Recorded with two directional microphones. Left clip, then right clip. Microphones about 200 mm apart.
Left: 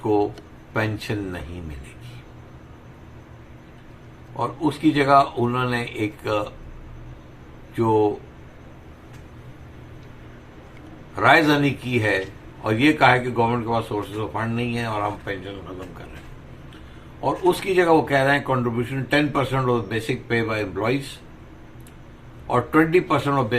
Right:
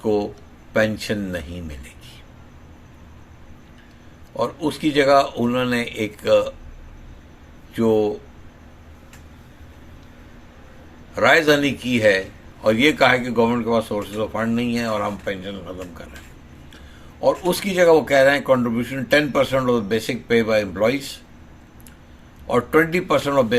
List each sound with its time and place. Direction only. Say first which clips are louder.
0.7 s speech: right 5 dB; 55° right (ahead or behind)
4.4 s speech: right 1 dB; 55° right (ahead or behind)
11.1 s speech: right 1 dB; 55° right (ahead or behind)
17.2 s speech: right 2 dB; 55° right (ahead or behind)
22.4 s speech: right 2 dB; 55° right (ahead or behind)